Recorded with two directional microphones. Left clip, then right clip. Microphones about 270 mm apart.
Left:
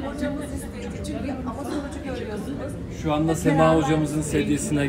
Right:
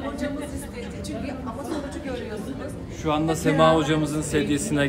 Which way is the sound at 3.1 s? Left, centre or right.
Centre.